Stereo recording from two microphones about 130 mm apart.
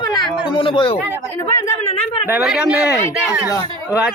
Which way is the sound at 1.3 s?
25° left (ahead or behind).